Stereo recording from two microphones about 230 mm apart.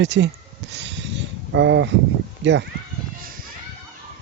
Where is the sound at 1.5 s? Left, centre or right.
Right.